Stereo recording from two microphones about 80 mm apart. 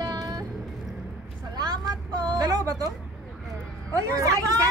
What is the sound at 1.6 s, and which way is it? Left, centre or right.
Vehicle, right.